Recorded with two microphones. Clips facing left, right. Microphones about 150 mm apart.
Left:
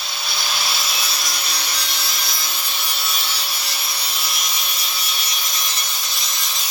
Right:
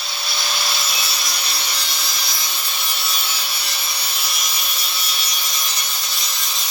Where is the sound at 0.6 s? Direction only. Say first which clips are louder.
Even; centre (ahead or behind).